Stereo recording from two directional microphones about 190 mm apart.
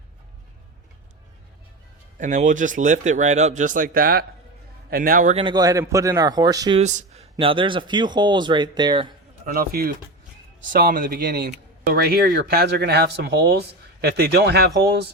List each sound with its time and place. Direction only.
2.1 s speech: 40° right (ahead or behind)
5.3 s speech: 25° right (ahead or behind)
6.7 s speech: 35° right (ahead or behind)
9.5 s speech: 50° right (ahead or behind)